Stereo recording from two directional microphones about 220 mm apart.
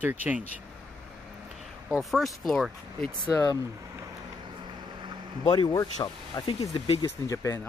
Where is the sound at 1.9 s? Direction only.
Centre (ahead or behind).